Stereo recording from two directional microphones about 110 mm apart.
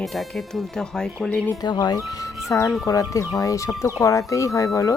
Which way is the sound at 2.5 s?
25° left (ahead or behind).